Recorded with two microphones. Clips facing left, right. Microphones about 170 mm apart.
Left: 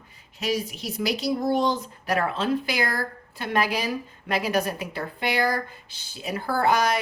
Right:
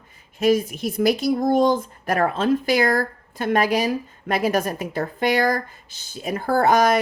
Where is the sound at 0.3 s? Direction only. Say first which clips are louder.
Right 9 dB; 50° right (ahead or behind).